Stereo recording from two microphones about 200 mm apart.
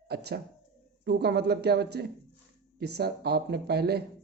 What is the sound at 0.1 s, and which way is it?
A man's voice, 55° right (ahead or behind).